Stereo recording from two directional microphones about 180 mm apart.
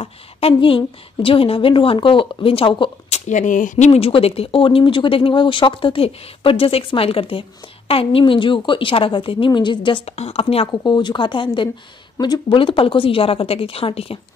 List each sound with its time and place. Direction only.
0.0 s a woman's voice: 30° left (ahead or behind)
3.3 s a woman's voice: 45° left (ahead or behind)
10.7 s a woman's voice: 20° left (ahead or behind)